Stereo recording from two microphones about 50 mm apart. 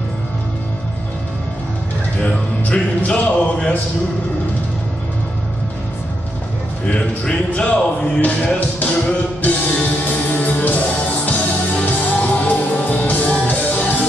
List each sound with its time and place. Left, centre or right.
3.1 s a sound: left
6.9 s music: left
8.5 s music: left